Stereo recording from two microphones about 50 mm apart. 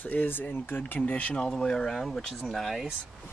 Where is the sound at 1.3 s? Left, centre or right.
Centre.